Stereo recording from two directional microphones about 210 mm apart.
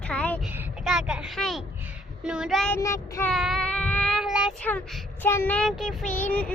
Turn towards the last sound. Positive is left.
turn(degrees=5)  # may be behind; listen again after turning